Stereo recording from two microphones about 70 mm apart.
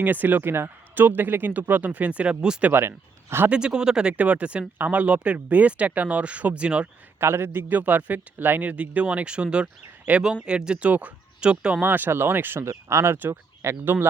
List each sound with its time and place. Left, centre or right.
0.0 s a man's voice: right
2.7 s a man's voice: right
3.5 s a man's voice: centre
7.2 s a man's voice: right; by 11.8 s centre
11.8 s speech: right
13.1 s speech: right